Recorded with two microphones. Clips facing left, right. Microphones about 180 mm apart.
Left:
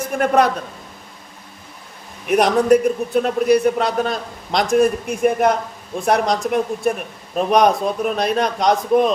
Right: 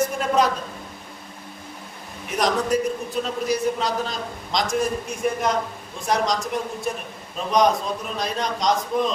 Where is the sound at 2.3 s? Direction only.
60° left (ahead or behind).